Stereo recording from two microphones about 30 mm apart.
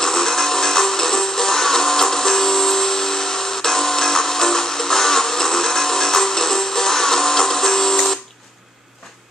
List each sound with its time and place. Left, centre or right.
0.0 s music: centre